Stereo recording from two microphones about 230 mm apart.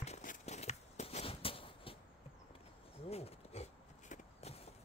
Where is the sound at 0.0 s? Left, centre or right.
Left.